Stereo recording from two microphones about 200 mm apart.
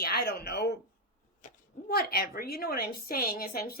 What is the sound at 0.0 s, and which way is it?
Speech, 50° left (ahead or behind).